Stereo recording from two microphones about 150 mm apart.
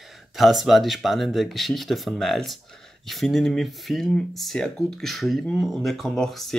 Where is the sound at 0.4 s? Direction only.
Centre (ahead or behind).